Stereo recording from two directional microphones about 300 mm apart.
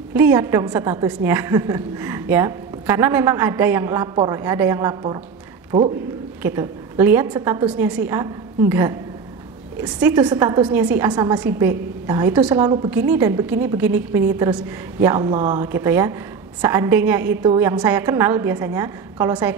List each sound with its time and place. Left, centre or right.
0.1 s a woman's voice: centre